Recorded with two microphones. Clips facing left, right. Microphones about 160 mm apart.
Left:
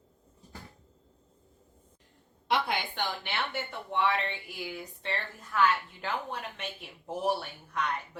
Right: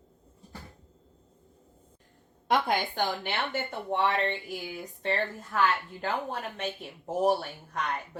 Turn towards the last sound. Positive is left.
turn(degrees=-40)  # may be behind; listen again after turning